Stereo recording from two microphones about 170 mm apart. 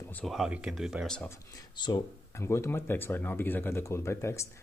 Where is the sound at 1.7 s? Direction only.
25° left (ahead or behind).